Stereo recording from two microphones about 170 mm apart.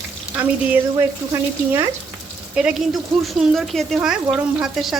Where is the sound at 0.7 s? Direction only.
15° right (ahead or behind).